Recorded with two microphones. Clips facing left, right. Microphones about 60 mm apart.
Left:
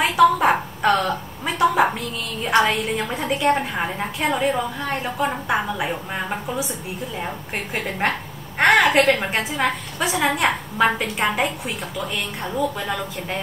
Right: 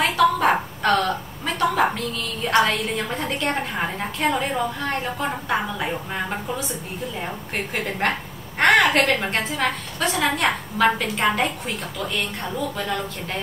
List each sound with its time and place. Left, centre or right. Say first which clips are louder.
0.0 s a sound: left 3 dB; centre
2.6 s a woman's voice: left 1 dB; centre
8.5 s a woman's voice: left 1 dB; centre